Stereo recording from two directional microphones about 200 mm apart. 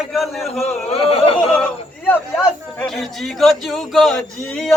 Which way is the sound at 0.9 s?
30° left (ahead or behind).